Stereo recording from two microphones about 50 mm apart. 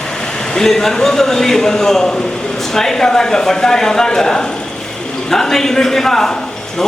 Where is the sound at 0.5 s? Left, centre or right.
Centre.